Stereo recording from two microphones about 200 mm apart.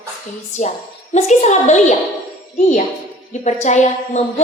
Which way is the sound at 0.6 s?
35° left (ahead or behind).